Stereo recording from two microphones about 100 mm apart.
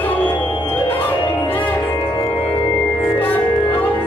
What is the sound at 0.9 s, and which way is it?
Music, 15° left (ahead or behind).